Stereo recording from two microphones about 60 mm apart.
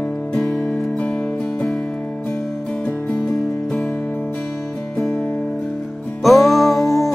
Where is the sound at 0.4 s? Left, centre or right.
Centre.